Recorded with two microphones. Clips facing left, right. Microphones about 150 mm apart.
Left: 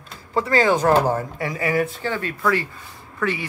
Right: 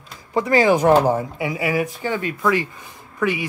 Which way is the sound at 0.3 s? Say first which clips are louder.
Right 2 dB; 15° right (ahead or behind).